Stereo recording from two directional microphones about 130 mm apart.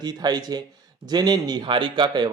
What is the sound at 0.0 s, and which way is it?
A man's voice, 30° right (ahead or behind).